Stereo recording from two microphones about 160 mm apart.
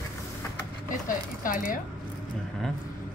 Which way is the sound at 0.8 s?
60° left (ahead or behind).